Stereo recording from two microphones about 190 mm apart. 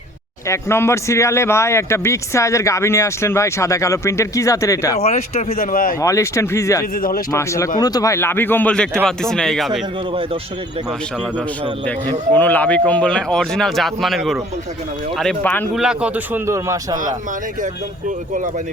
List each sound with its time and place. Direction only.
0.4 s speech: 15° left (ahead or behind)
5.0 s speech: 35° left (ahead or behind)
5.5 s speech: 50° left (ahead or behind)
6.0 s speech: 15° left (ahead or behind)
6.9 s speech: 50° left (ahead or behind)
7.3 s speech: 15° left (ahead or behind); by 9.8 s centre (ahead or behind)
12.3 s speech: 10° left (ahead or behind)
15.8 s a man's voice: 5° right (ahead or behind)